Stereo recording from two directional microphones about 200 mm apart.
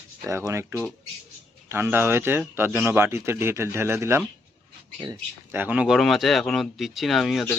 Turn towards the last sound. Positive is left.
turn(degrees=0)  # may be behind; listen again after turning